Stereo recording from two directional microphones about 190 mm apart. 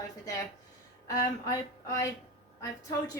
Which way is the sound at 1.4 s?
15° left (ahead or behind).